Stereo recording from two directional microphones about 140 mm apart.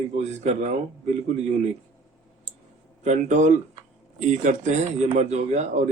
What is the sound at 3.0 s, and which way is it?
Speech, 55° right (ahead or behind).